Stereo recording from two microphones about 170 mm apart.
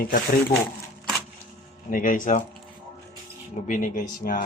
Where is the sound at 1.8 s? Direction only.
55° left (ahead or behind).